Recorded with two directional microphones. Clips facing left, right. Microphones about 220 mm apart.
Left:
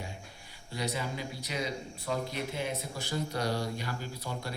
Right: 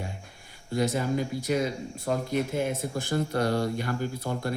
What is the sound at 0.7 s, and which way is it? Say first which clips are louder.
Speech: right 9 dB; 50° right (ahead or behind).